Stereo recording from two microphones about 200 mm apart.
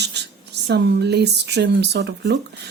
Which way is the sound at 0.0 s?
55° right (ahead or behind).